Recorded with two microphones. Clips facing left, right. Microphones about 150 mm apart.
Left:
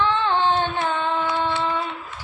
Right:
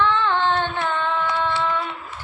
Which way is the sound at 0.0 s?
15° left (ahead or behind).